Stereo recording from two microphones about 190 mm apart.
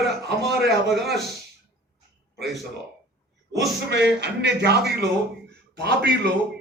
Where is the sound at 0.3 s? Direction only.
60° right (ahead or behind).